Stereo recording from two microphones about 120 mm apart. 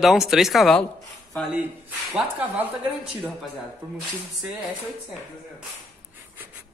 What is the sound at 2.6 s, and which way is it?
Speech, 15° right (ahead or behind).